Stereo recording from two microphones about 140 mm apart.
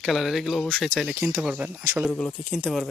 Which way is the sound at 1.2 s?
15° right (ahead or behind).